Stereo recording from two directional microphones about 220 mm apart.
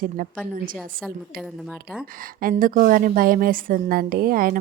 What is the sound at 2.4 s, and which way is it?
A woman's voice, 40° right (ahead or behind).